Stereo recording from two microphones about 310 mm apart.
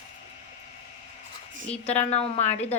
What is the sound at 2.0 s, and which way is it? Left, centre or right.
Speech, left.